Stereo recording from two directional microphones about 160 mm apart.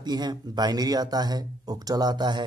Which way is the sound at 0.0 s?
25° right (ahead or behind).